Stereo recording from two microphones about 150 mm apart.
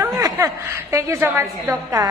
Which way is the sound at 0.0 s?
20° right (ahead or behind).